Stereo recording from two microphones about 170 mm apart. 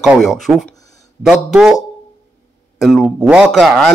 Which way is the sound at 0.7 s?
20° left (ahead or behind).